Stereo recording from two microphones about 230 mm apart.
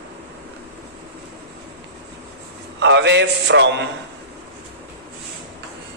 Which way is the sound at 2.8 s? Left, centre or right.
Right.